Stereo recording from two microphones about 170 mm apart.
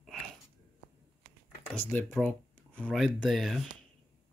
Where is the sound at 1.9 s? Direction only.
5° left (ahead or behind).